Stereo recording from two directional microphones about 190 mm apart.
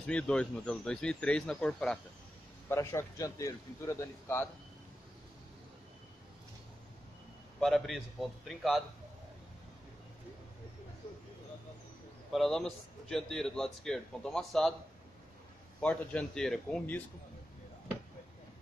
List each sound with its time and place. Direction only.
0.0 s a man's voice: 5° left (ahead or behind)
7.6 s speech: centre (ahead or behind)
12.3 s speech: centre (ahead or behind)
15.8 s speech: 5° left (ahead or behind)